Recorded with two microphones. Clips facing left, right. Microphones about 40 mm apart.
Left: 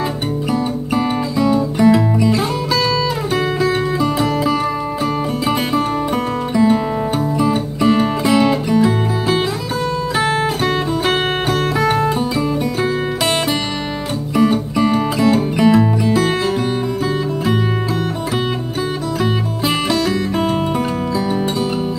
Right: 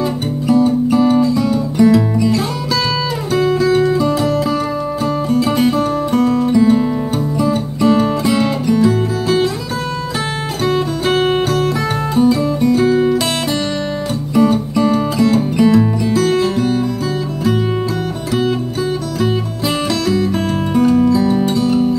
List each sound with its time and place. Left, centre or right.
0.5 s music: centre
3.3 s music: left
8.8 s music: left
10.6 s music: left
14.3 s music: centre
20.7 s music: centre